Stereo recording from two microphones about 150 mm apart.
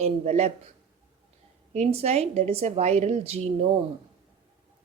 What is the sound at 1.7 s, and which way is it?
A woman's voice, 45° right (ahead or behind).